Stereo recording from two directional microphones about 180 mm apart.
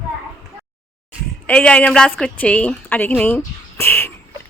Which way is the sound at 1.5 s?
5° left (ahead or behind).